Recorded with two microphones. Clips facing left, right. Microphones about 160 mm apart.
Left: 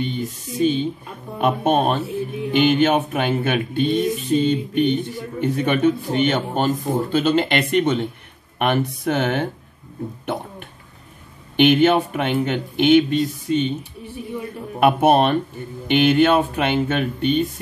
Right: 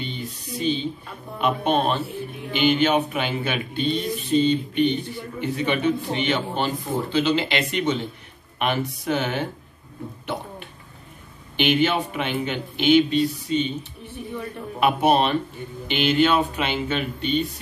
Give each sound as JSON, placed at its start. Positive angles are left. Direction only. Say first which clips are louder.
{"t": 0.0, "sound": "speech", "louder": "left 7 dB", "side_deg": 50}
{"t": 11.5, "sound": "speech", "louder": "left 6 dB", "side_deg": 55}
{"t": 14.8, "sound": "speech", "louder": "left 4 dB", "side_deg": 55}